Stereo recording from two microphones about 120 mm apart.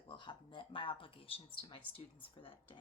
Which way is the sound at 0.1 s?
40° left (ahead or behind).